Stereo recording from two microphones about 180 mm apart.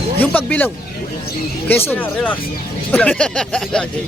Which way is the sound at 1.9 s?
10° left (ahead or behind).